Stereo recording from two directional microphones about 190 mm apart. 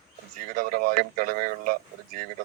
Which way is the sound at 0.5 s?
50° right (ahead or behind).